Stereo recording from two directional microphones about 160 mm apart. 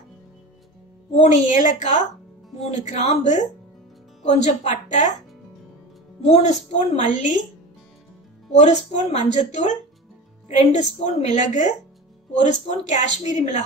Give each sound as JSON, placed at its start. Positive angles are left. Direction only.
{"t": 1.1, "sound": "a woman's voice", "side_deg": 45}
{"t": 6.2, "sound": "a woman's voice", "side_deg": 45}
{"t": 8.5, "sound": "a woman's voice", "side_deg": 45}